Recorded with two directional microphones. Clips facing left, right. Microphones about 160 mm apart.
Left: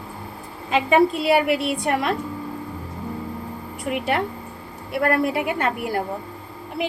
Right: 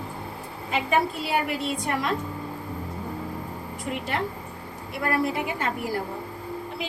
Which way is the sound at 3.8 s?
65° left (ahead or behind).